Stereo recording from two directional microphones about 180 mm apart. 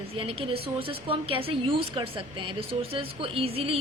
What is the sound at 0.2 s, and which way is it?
A woman's voice, 30° right (ahead or behind).